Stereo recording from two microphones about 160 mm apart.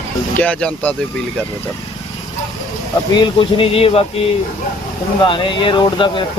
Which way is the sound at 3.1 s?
30° left (ahead or behind).